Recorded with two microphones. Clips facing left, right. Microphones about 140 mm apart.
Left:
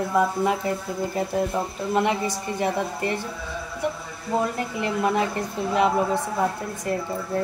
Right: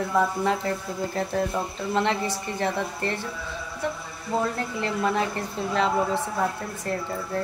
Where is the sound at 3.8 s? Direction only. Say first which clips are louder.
Left 2 dB; 15° left (ahead or behind).